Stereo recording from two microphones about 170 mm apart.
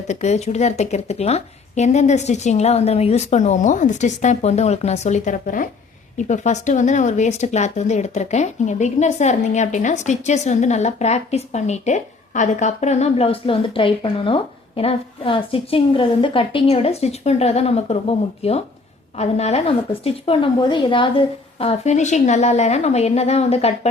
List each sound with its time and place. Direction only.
0.1 s speech: 40° left (ahead or behind)